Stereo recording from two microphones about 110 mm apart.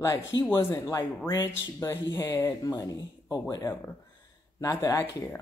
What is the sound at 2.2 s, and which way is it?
Speech, 25° left (ahead or behind).